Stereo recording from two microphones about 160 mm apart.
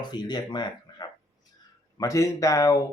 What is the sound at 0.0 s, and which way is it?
Speech, 25° left (ahead or behind).